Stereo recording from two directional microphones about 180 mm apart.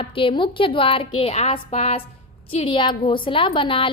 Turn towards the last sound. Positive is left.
turn(degrees=30)  # may be behind; listen again after turning